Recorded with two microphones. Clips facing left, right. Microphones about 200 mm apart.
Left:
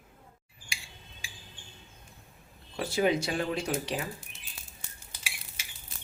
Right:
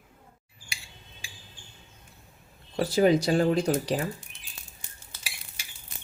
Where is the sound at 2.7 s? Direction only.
35° right (ahead or behind).